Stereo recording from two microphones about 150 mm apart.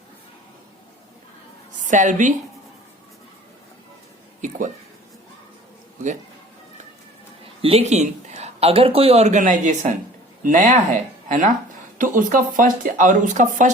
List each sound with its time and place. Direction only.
1.9 s speech: 55° right (ahead or behind)
4.4 s a sound: 60° right (ahead or behind)
7.6 s speech: 40° right (ahead or behind)